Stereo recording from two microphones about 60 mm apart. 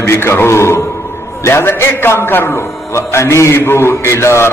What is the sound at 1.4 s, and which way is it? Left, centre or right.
A man's voice, left.